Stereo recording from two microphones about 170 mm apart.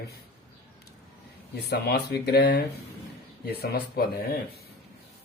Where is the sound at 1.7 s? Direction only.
80° left.